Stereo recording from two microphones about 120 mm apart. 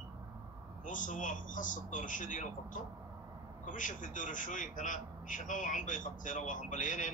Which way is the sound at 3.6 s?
90° left.